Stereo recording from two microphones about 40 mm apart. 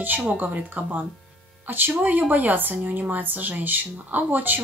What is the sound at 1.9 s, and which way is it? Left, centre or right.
Speech, right.